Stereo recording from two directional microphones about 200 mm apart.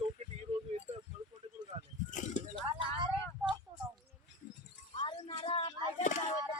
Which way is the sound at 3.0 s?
25° right (ahead or behind).